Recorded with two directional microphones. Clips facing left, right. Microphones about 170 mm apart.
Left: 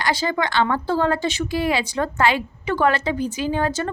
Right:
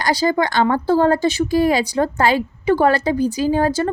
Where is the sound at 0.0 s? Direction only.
35° right (ahead or behind).